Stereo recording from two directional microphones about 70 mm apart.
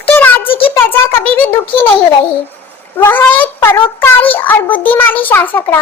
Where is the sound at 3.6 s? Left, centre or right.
Left.